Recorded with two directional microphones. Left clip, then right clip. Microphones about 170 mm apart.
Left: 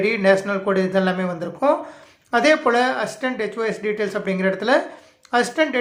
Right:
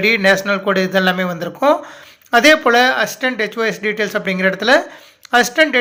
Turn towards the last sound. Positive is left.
turn(degrees=-20)  # may be behind; listen again after turning